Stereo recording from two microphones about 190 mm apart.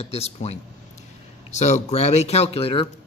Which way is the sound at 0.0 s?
35° left (ahead or behind).